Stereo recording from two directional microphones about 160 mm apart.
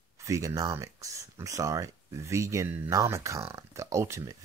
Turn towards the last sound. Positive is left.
turn(degrees=-20)  # may be behind; listen again after turning